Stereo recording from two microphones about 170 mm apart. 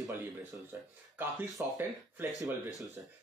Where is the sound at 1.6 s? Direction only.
10° right (ahead or behind).